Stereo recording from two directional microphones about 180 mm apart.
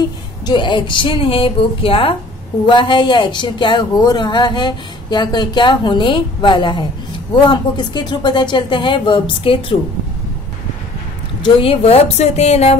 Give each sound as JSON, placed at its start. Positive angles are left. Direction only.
{"t": 0.0, "sound": "speech", "side_deg": 25}
{"t": 11.4, "sound": "a woman's voice", "side_deg": 30}